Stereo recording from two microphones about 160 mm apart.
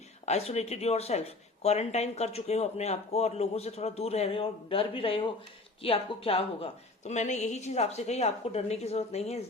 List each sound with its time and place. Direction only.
0.3 s a woman's voice: 40° left (ahead or behind)